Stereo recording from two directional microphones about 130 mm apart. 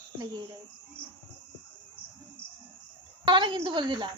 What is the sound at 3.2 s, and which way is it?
Speech, 35° right (ahead or behind).